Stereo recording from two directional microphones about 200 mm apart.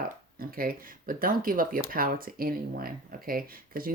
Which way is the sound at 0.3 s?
45° right (ahead or behind).